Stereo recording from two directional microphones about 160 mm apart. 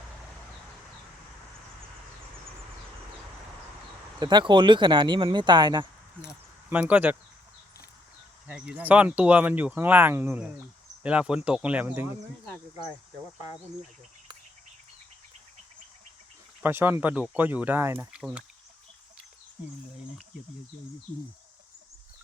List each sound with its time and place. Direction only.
4.2 s speech: 30° right (ahead or behind)
6.7 s speech: 10° right (ahead or behind)
8.4 s speech: 5° right (ahead or behind)
16.6 s speech: 15° right (ahead or behind)